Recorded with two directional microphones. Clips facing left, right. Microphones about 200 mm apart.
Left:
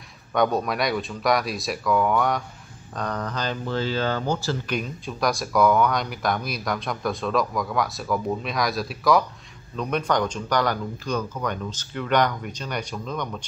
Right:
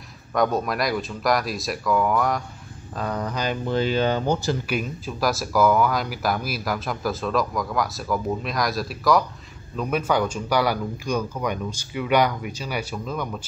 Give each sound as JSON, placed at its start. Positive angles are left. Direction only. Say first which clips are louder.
{"t": 0.3, "sound": "speech", "louder": "even", "side_deg": 0}
{"t": 4.6, "sound": "speech", "louder": "right 1 dB", "side_deg": -5}